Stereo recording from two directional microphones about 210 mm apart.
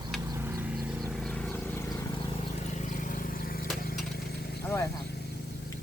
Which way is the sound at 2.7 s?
35° left (ahead or behind).